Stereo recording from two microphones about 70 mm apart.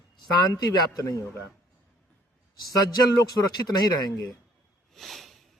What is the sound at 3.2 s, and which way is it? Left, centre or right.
Speech, left.